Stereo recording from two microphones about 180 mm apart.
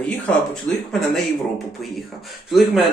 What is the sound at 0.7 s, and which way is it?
Speech, 5° left (ahead or behind).